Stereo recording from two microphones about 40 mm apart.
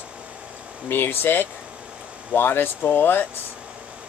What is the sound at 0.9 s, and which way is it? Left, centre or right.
Speech, left.